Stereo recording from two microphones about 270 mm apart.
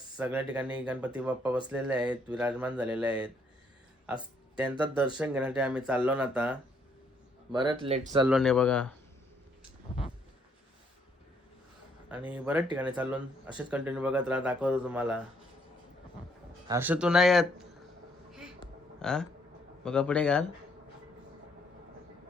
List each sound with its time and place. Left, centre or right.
0.2 s speech: centre
4.0 s music: centre
5.1 s speech: centre
7.5 s speech: centre
8.3 s speech: centre
12.3 s speech: centre
16.6 s speech: centre
18.9 s speech: centre